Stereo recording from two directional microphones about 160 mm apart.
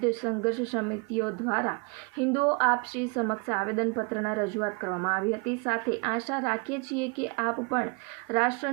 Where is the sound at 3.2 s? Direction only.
10° left (ahead or behind).